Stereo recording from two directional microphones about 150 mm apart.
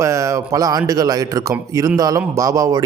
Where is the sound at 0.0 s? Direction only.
20° right (ahead or behind).